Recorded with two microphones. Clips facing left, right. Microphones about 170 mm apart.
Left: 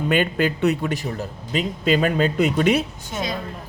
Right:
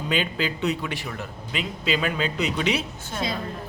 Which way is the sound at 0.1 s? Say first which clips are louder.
Left 5 dB; 55° left (ahead or behind).